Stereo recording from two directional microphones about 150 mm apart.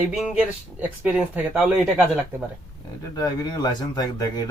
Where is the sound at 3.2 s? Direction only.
25° left (ahead or behind).